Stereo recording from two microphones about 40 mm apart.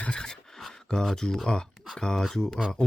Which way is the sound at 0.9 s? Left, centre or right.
Centre.